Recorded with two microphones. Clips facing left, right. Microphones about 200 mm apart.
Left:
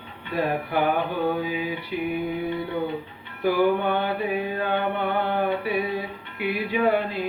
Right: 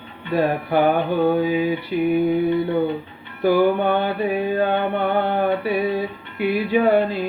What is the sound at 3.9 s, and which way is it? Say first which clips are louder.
Music: right 4 dB; 30° right (ahead or behind).